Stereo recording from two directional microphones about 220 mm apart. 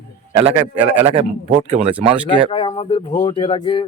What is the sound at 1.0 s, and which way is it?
Speech, 25° right (ahead or behind).